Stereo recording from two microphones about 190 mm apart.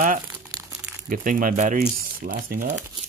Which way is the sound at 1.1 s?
45° right (ahead or behind).